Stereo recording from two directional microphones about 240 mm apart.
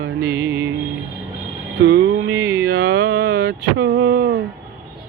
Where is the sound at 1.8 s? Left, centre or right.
Right.